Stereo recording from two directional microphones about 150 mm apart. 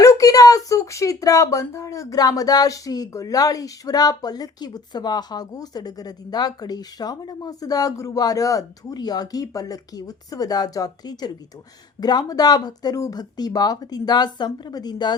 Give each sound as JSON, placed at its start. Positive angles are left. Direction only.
{"t": 0.0, "sound": "speech", "side_deg": 20}